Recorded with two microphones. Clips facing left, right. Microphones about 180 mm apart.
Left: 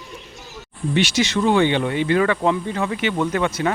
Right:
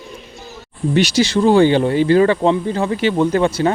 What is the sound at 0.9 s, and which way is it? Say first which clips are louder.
Speech: right 5 dB; 35° right (ahead or behind).